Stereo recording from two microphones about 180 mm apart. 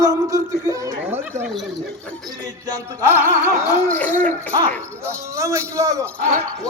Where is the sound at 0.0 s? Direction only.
20° right (ahead or behind).